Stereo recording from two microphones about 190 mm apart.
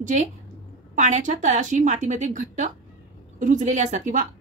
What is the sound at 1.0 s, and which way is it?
A woman's voice, 40° right (ahead or behind).